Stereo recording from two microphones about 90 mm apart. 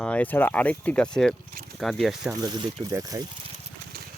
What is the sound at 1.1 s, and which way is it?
Speech, 5° left (ahead or behind).